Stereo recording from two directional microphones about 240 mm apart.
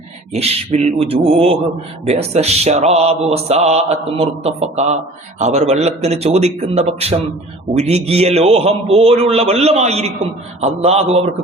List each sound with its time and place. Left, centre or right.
0.3 s mantra: right